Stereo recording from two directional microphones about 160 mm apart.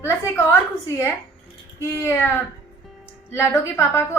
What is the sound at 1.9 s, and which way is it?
Speech, 15° left (ahead or behind).